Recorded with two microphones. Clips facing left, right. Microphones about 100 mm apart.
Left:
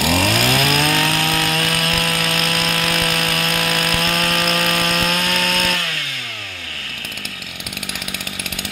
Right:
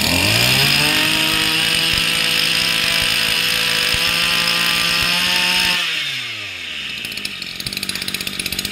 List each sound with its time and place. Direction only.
0.1 s chainsaw: 30° left (ahead or behind)